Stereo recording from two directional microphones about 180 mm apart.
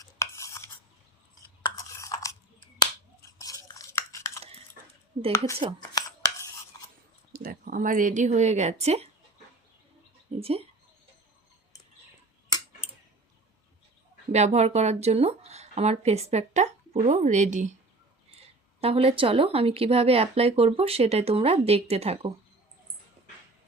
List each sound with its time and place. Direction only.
0.0 s cutlery: 15° left (ahead or behind)
1.4 s chewing: 20° left (ahead or behind)
2.7 s a sound: 20° left (ahead or behind)
5.6 s speech: 30° right (ahead or behind)
6.0 s scissors: 20° left (ahead or behind)
7.3 s speech: 55° right (ahead or behind); by 9.0 s 35° right (ahead or behind)
10.4 s speech: 35° right (ahead or behind)
14.3 s speech: 40° right (ahead or behind)
18.8 s speech: 35° right (ahead or behind)